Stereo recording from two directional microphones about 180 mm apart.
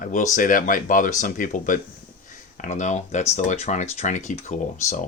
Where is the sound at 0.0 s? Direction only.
45° left (ahead or behind).